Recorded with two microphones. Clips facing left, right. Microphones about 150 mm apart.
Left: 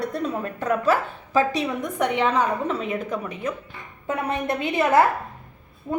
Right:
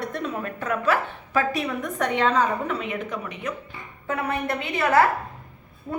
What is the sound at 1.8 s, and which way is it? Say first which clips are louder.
Speech: left 1 dB; 15° left (ahead or behind).